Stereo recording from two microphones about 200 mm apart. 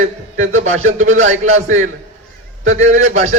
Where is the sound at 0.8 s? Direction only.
90° right.